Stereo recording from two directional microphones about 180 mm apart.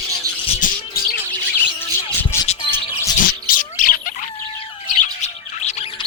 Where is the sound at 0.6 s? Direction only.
45° left (ahead or behind).